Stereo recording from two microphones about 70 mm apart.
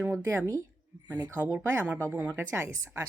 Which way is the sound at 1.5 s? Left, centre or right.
Right.